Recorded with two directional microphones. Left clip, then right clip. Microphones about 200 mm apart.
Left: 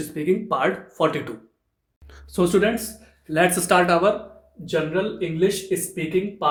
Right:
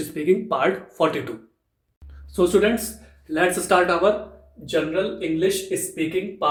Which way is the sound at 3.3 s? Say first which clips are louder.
Left 1 dB; 45° left (ahead or behind).